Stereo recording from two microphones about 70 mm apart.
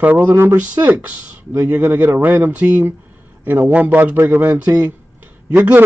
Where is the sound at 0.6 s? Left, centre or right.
Right.